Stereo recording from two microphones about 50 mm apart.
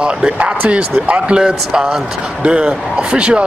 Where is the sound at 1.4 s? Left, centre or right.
Centre.